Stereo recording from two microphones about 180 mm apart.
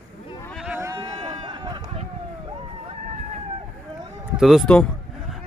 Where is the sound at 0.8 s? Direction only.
20° right (ahead or behind).